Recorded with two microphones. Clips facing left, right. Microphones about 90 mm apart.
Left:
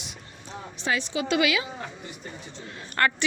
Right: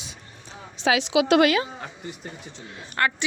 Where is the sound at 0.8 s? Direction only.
90° right.